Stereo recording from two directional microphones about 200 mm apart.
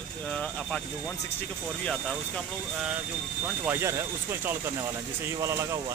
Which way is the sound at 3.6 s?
15° right (ahead or behind).